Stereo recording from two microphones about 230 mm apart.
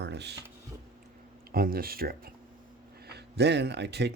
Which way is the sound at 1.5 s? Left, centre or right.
Right.